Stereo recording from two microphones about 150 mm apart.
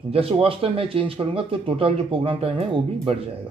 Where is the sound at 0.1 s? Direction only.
40° right (ahead or behind).